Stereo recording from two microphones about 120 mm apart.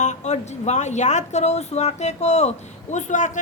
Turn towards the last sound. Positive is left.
turn(degrees=90)